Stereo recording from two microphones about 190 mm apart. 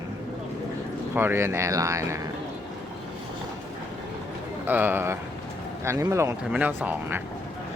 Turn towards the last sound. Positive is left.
turn(degrees=-10)  # may be behind; listen again after turning